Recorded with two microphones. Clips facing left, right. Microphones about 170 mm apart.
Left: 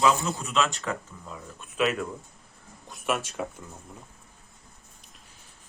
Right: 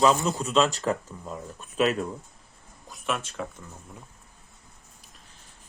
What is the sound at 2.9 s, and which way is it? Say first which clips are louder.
Speech: left 2 dB; 5° left (ahead or behind).